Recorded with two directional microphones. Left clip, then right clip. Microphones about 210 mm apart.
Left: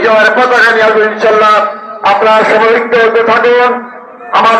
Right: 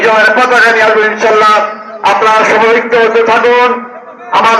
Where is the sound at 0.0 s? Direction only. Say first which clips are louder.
Even; 40° right (ahead or behind).